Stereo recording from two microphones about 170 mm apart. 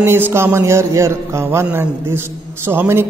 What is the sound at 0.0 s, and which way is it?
Speech, 15° right (ahead or behind).